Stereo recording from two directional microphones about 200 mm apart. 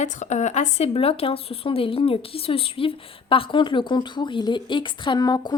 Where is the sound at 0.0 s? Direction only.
35° left (ahead or behind).